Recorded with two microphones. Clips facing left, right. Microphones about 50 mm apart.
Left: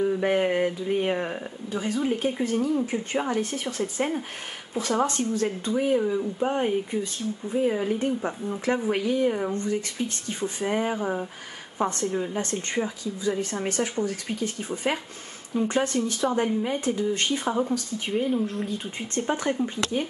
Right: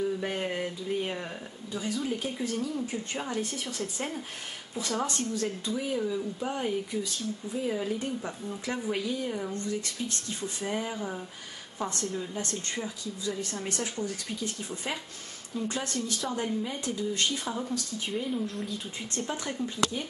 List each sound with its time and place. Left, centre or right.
0.0 s speech: left